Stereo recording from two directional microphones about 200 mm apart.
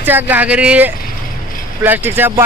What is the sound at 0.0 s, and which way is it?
Speech, 10° right (ahead or behind).